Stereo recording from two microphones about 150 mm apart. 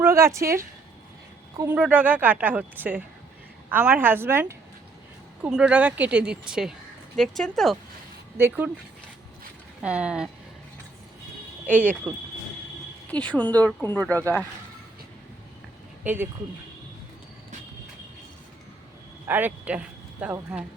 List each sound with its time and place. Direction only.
0.0 s a woman's voice: 20° right (ahead or behind); by 7.8 s centre (ahead or behind)
8.4 s a woman's voice: 15° right (ahead or behind)
9.8 s a woman's voice: 5° right (ahead or behind)
11.6 s a woman's voice: 10° right (ahead or behind)
13.1 s speech: 10° left (ahead or behind)
16.0 s a woman's voice: 15° right (ahead or behind)
19.3 s speech: 10° right (ahead or behind)